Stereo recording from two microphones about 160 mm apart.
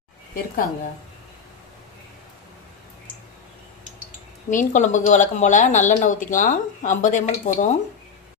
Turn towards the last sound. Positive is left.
turn(degrees=50)  # may be behind; listen again after turning